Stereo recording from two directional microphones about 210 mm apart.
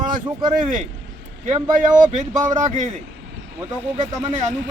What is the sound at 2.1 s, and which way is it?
Speech, 35° right (ahead or behind).